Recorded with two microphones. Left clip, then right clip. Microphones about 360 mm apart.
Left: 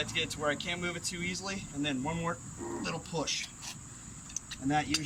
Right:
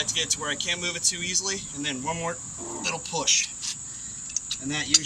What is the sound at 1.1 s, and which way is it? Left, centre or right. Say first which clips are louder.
Speech: right 8 dB; right.